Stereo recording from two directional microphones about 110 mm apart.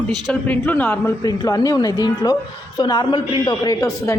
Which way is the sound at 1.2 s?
35° left (ahead or behind).